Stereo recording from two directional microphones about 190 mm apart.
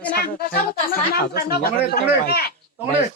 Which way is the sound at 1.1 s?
55° left (ahead or behind).